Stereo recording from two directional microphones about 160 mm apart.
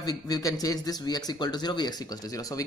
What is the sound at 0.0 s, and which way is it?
Speech, 20° left (ahead or behind).